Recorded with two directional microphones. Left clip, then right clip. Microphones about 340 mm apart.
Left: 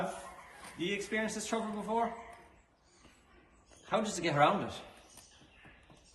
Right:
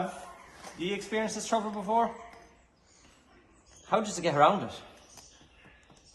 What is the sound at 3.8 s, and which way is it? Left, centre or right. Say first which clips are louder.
Speech: right 5 dB; centre.